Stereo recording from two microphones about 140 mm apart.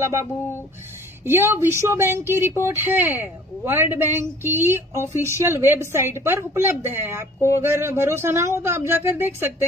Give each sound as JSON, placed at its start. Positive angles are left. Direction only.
{"t": 1.2, "sound": "a woman's voice", "side_deg": -15}